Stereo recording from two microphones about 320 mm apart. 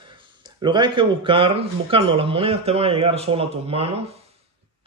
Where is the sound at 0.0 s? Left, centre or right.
Centre.